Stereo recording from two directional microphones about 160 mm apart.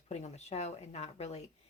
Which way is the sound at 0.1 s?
45° left (ahead or behind).